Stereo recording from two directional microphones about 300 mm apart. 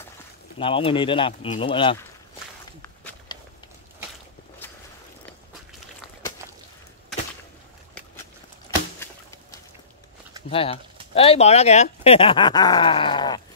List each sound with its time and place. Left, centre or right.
0.6 s speech: centre
2.8 s walk: centre
9.0 s a sound: centre
10.5 s speech: centre